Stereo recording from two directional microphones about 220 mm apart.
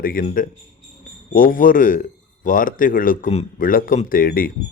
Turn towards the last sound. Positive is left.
turn(degrees=40)  # may be behind; listen again after turning